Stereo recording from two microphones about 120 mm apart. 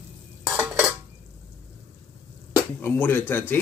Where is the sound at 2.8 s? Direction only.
15° left (ahead or behind).